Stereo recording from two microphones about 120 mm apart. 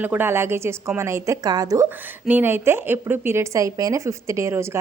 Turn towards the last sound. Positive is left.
turn(degrees=-25)  # may be behind; listen again after turning